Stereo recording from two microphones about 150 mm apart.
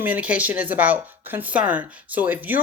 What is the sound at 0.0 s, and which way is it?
Speech, 10° right (ahead or behind).